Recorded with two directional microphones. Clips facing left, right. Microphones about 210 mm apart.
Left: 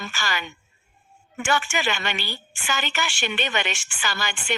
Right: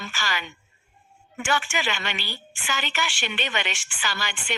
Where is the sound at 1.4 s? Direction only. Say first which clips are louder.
Left 2 dB; 45° left (ahead or behind).